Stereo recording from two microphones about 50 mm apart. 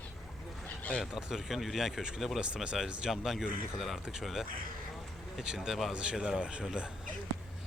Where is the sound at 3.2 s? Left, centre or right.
Centre.